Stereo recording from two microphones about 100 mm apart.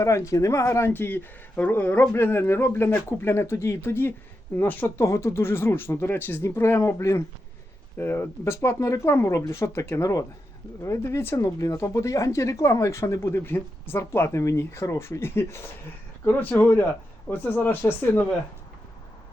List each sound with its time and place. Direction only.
0.0 s speech: 30° left (ahead or behind)